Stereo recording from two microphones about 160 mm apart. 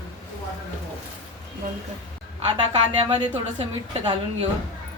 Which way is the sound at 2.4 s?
30° right (ahead or behind).